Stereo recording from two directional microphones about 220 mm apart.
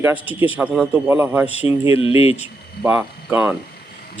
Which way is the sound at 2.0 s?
25° left (ahead or behind).